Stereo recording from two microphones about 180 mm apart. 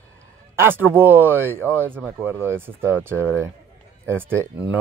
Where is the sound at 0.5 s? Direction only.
10° right (ahead or behind).